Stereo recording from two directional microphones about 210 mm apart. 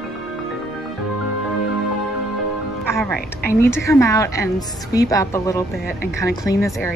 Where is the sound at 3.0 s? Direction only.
10° left (ahead or behind).